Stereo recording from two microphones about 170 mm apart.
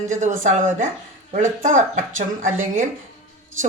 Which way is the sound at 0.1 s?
45° right (ahead or behind).